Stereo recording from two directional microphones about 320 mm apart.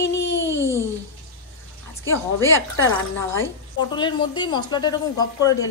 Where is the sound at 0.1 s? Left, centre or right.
Left.